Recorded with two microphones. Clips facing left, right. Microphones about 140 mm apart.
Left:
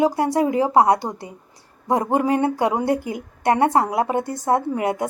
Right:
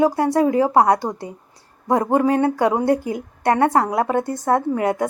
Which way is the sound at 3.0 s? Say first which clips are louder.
Right 1 dB; 35° right (ahead or behind).